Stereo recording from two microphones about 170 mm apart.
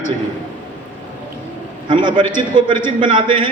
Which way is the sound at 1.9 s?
25° right (ahead or behind).